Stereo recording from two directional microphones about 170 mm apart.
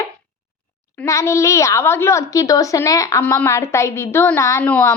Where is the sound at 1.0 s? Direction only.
20° left (ahead or behind).